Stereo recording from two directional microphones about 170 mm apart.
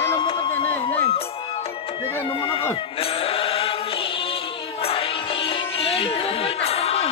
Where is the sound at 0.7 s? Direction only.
10° left (ahead or behind).